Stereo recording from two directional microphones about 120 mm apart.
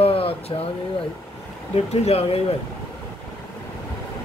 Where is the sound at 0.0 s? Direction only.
50° left (ahead or behind).